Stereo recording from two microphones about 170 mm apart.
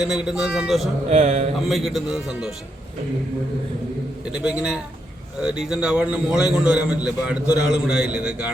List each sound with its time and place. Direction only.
0.0 s a man's voice: 5° right (ahead or behind)
1.1 s speech: 40° right (ahead or behind)
1.6 s a man's voice: centre (ahead or behind)
4.3 s a man's voice: 5° right (ahead or behind)